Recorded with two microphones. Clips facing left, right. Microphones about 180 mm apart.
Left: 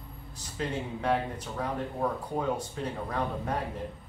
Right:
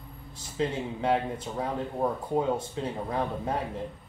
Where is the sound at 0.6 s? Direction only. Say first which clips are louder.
Right 3 dB; 25° right (ahead or behind).